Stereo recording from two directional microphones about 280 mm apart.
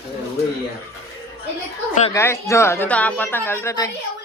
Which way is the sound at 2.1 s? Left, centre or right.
Centre.